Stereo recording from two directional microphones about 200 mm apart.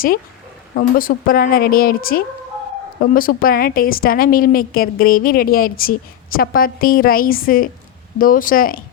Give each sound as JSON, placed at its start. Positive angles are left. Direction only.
{"t": 0.8, "sound": "a woman's voice", "side_deg": 45}